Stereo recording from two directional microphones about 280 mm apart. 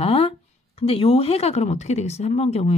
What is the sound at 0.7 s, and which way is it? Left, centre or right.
Speech, left.